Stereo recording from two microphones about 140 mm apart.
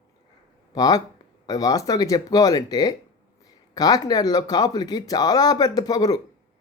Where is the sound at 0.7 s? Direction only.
30° left (ahead or behind).